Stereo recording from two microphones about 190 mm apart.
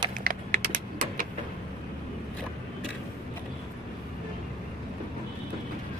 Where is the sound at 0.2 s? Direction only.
45° right (ahead or behind).